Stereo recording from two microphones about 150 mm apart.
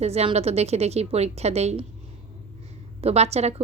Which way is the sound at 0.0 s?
45° right (ahead or behind).